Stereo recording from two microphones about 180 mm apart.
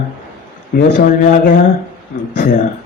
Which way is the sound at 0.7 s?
45° left (ahead or behind).